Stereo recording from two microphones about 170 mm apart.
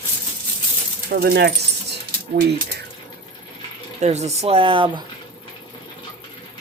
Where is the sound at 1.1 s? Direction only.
70° right (ahead or behind).